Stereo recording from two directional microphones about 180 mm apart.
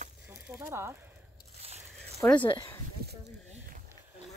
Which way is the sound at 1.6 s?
35° right (ahead or behind).